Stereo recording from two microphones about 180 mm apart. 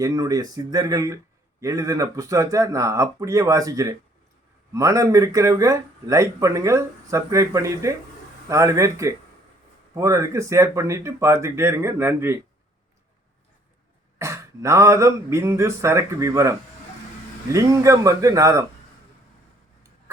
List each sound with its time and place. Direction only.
0.0 s speech: 20° right (ahead or behind)
14.2 s speech: 15° right (ahead or behind)